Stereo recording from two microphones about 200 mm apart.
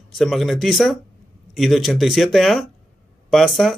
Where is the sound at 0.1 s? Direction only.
Centre (ahead or behind).